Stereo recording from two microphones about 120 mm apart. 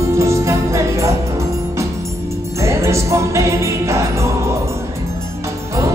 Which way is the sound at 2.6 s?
25° right (ahead or behind).